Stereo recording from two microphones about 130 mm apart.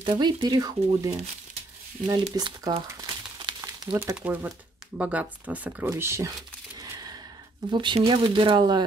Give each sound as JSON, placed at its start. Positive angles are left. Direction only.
{"t": 0.0, "sound": "speech", "side_deg": -35}
{"t": 2.9, "sound": "crumpling", "side_deg": -30}
{"t": 4.1, "sound": "speech", "side_deg": -10}
{"t": 6.8, "sound": "a sound", "side_deg": -30}
{"t": 7.7, "sound": "speech", "side_deg": -40}